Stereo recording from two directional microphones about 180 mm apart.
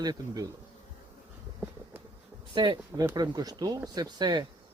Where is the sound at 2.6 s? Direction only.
25° right (ahead or behind).